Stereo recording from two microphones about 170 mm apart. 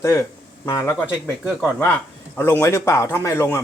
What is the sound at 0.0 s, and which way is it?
Speech, 15° left (ahead or behind).